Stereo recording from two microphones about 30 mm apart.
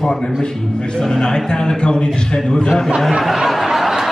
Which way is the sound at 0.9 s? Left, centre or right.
Left.